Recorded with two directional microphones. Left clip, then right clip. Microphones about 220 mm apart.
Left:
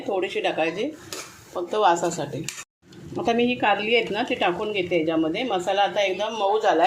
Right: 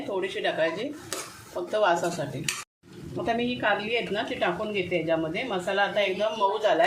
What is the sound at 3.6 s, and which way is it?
A woman's voice, 35° left (ahead or behind).